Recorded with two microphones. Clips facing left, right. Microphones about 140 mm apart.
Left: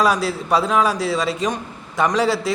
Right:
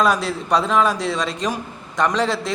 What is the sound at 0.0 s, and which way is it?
A man's voice, 5° left (ahead or behind).